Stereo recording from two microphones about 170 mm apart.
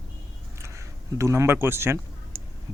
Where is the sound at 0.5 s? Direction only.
15° right (ahead or behind).